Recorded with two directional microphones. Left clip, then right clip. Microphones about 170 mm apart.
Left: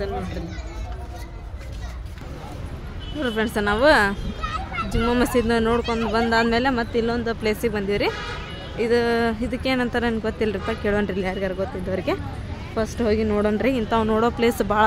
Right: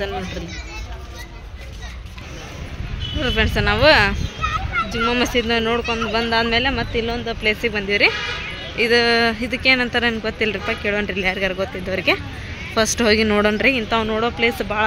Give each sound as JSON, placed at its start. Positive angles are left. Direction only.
{"t": 3.2, "sound": "speech", "side_deg": 15}
{"t": 8.7, "sound": "speech", "side_deg": 5}
{"t": 12.7, "sound": "speech", "side_deg": 0}
{"t": 13.6, "sound": "speech", "side_deg": 15}